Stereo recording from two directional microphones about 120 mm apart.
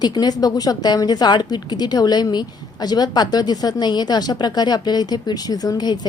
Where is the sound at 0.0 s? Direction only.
35° left (ahead or behind).